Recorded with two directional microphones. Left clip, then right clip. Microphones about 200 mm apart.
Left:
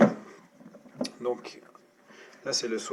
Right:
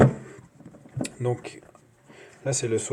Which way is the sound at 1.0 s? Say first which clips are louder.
Right 2 dB; 40° right (ahead or behind).